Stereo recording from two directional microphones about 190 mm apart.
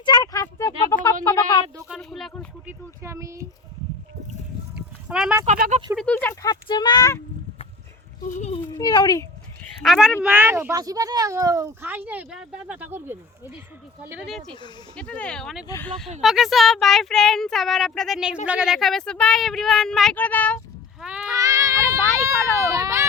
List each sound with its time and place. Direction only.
0.0 s a sound: 20° left (ahead or behind)
1.9 s a sound: centre (ahead or behind)
2.6 s speech: 15° right (ahead or behind)
5.0 s speech: 5° right (ahead or behind)
5.5 s speech: 45° right (ahead or behind)
6.0 s speech: 10° left (ahead or behind)
6.5 s speech: 20° left (ahead or behind)
8.4 s a child's voice: 35° left (ahead or behind)
8.7 s speech: 20° left (ahead or behind)
9.8 s speech: centre (ahead or behind)
15.6 s speech: 15° left (ahead or behind)
16.2 s speech: centre (ahead or behind)
21.0 s speech: 5° right (ahead or behind)
21.3 s speech: 15° right (ahead or behind)